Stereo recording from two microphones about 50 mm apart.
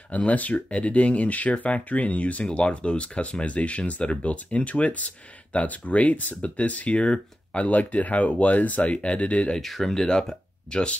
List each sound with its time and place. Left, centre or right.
0.1 s speech: left
9.6 s speech: centre